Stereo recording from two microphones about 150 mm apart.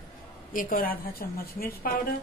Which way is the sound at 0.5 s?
65° left (ahead or behind).